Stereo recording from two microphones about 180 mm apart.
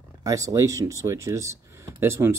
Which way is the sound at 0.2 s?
20° right (ahead or behind).